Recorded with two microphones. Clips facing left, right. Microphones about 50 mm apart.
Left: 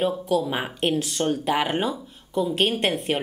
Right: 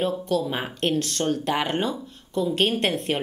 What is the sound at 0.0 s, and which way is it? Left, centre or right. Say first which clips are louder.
Speech: left 1 dB; centre.